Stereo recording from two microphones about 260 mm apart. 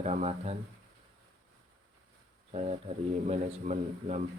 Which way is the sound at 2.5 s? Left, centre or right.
Right.